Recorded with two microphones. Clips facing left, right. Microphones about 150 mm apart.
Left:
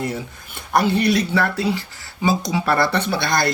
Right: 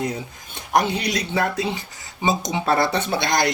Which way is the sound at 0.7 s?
15° right (ahead or behind).